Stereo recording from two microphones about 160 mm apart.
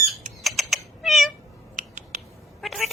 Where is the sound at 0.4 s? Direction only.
Centre (ahead or behind).